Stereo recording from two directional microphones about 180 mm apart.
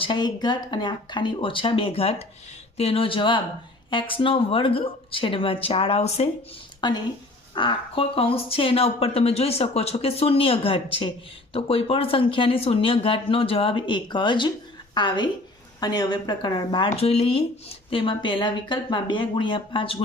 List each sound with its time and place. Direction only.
0.0 s speech: 25° left (ahead or behind)